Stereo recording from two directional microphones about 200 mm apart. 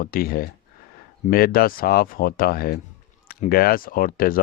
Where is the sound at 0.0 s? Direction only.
45° left (ahead or behind).